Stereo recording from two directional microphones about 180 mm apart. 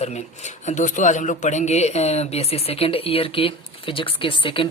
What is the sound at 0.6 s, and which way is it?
Speech, 40° left (ahead or behind).